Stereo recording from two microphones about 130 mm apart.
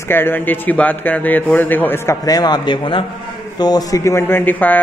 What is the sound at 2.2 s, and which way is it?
A man's voice, 30° left (ahead or behind).